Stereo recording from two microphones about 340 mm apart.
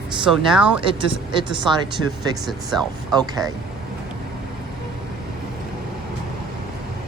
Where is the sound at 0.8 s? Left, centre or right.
Centre.